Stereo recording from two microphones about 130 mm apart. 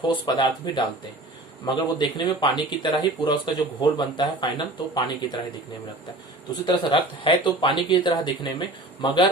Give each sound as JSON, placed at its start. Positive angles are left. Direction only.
{"t": 0.3, "sound": "speech", "side_deg": 35}
{"t": 6.5, "sound": "speech", "side_deg": 40}